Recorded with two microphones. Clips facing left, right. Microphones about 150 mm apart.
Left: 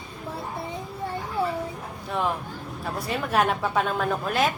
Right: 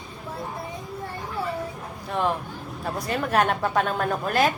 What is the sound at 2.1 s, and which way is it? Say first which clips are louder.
Speech: right 2 dB; centre (ahead or behind).